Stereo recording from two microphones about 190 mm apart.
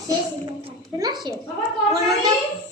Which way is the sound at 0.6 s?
20° right (ahead or behind).